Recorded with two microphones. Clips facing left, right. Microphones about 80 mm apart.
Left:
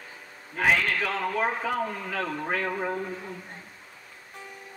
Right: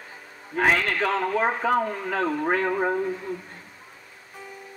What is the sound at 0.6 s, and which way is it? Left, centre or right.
Speech, right.